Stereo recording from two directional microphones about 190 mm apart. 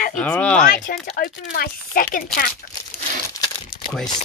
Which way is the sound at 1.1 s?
55° left (ahead or behind).